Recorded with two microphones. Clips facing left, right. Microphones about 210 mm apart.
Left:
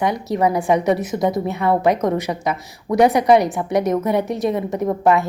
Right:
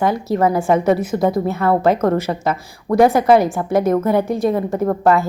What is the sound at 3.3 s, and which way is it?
A woman's voice, centre (ahead or behind).